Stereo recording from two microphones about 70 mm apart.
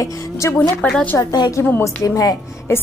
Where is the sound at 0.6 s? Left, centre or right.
Centre.